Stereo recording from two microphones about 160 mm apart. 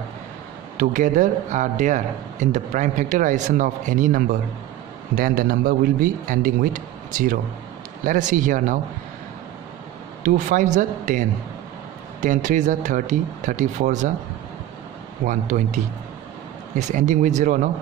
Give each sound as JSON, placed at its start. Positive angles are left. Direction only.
{"t": 0.7, "sound": "speech", "side_deg": -55}
{"t": 10.2, "sound": "speech", "side_deg": -55}
{"t": 15.2, "sound": "speech", "side_deg": -50}